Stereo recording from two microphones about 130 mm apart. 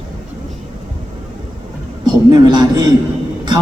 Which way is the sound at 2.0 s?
30° right (ahead or behind).